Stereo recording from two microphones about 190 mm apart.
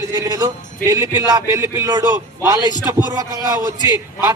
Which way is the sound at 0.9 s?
20° right (ahead or behind).